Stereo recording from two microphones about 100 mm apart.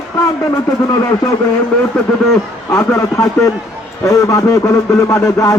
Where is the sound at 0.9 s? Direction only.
35° left (ahead or behind).